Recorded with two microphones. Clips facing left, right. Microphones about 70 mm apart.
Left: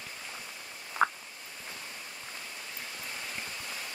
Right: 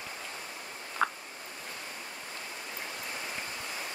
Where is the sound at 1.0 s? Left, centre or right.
Centre.